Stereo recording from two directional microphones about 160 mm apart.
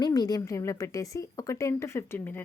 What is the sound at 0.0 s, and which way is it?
A woman's voice, 25° left (ahead or behind).